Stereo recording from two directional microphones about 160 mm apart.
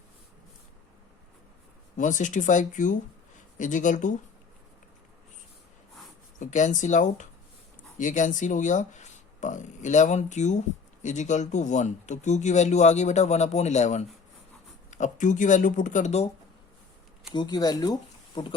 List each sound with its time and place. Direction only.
2.0 s speech: 50° left (ahead or behind)
6.4 s speech: 50° left (ahead or behind)
17.3 s speech: 25° left (ahead or behind)